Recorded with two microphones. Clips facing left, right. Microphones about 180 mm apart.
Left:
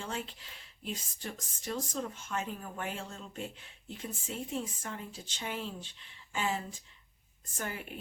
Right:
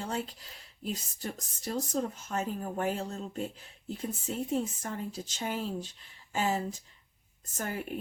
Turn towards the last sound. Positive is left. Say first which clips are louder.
# right 4 dB
turn(degrees=-40)  # may be behind; listen again after turning